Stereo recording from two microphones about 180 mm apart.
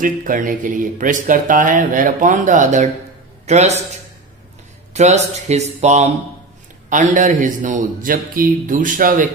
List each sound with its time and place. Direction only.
0.0 s speech: 45° right (ahead or behind)
4.9 s speech: 40° right (ahead or behind)